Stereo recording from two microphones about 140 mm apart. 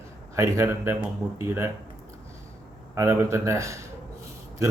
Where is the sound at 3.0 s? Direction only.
20° right (ahead or behind).